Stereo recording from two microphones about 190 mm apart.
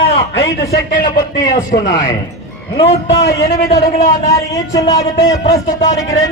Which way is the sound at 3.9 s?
35° left (ahead or behind).